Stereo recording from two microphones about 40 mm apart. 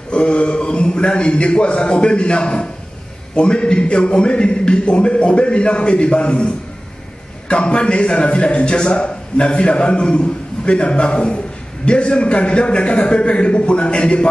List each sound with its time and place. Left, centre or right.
0.1 s a man's voice: left